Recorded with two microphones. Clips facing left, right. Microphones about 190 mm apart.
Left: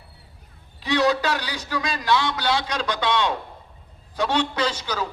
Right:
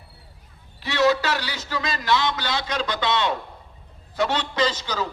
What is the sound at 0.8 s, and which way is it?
A man's voice, 15° left (ahead or behind).